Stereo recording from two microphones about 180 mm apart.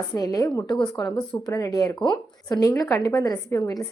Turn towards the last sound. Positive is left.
turn(degrees=20)  # may be behind; listen again after turning